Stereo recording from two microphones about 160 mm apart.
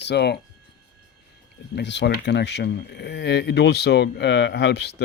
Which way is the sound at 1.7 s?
90° left.